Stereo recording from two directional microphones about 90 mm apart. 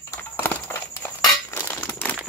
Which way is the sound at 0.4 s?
25° left (ahead or behind).